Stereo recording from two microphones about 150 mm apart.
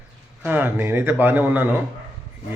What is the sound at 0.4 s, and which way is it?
Speech, 15° right (ahead or behind).